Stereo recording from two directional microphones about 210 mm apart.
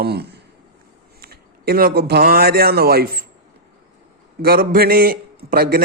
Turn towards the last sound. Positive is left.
turn(degrees=-45)  # may be behind; listen again after turning